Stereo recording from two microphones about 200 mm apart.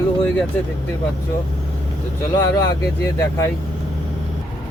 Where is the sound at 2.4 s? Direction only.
15° left (ahead or behind).